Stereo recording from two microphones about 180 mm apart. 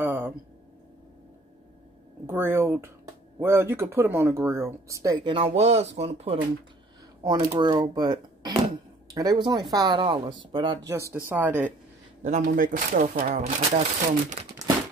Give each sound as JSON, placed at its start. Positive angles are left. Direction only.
{"t": 0.0, "sound": "a sound", "side_deg": -10}
{"t": 2.2, "sound": "speech", "side_deg": -10}
{"t": 7.2, "sound": "speech", "side_deg": -25}
{"t": 10.9, "sound": "speech", "side_deg": -15}
{"t": 12.2, "sound": "speech", "side_deg": -45}